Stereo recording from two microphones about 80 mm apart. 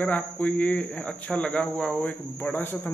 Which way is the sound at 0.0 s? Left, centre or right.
Centre.